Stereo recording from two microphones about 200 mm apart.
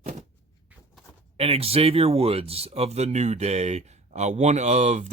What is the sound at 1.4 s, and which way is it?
Speech, 30° right (ahead or behind).